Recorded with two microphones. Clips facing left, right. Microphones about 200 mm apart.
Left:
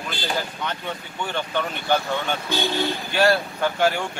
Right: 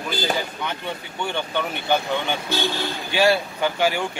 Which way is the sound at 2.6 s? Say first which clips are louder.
Left 2 dB; centre (ahead or behind).